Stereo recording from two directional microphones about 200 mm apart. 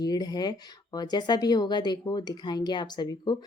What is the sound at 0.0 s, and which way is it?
A woman's voice, 20° left (ahead or behind).